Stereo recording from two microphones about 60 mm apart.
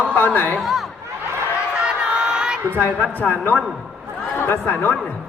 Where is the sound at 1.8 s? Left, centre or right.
Centre.